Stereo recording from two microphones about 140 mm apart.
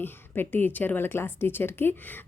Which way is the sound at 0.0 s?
15° left (ahead or behind).